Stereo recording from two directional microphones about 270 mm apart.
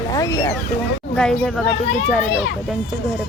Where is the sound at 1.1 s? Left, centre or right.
Centre.